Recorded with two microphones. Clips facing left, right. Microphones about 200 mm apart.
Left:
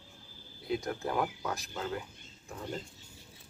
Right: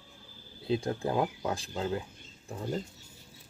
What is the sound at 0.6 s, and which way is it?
Speech, 30° right (ahead or behind).